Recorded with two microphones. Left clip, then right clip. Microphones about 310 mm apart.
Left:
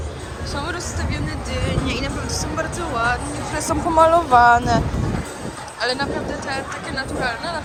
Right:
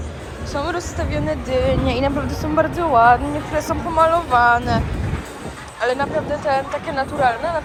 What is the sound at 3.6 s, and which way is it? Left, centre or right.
Speech, centre.